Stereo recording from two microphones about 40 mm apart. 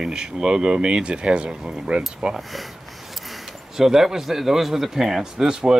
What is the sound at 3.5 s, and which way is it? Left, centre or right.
Speech, centre.